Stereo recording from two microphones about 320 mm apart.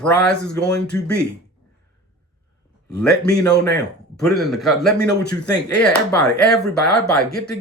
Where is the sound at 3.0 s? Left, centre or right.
Centre.